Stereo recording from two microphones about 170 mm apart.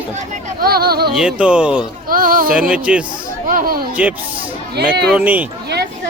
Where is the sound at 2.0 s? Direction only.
55° right (ahead or behind).